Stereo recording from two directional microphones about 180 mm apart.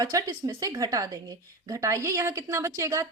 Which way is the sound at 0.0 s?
20° right (ahead or behind).